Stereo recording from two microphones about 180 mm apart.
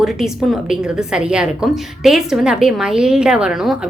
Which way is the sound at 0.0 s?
Centre (ahead or behind).